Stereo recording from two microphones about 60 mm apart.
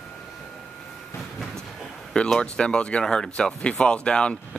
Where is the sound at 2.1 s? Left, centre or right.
Centre.